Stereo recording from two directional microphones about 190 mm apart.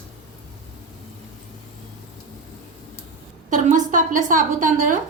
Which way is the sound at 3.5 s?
40° right (ahead or behind).